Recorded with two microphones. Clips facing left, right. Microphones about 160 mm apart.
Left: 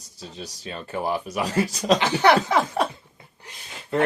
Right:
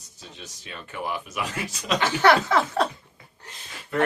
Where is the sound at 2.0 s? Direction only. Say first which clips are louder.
Right 2 dB; 15° left (ahead or behind).